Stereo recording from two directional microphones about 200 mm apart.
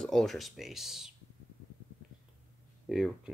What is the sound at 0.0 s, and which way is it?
Speech, centre (ahead or behind).